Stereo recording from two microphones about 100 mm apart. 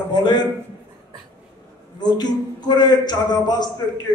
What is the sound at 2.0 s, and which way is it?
A man's voice, 45° left (ahead or behind).